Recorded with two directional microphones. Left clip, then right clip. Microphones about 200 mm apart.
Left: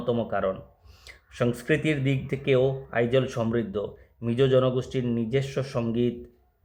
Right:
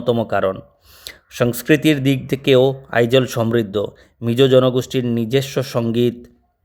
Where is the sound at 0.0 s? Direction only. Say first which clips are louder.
Right 9 dB; 40° right (ahead or behind).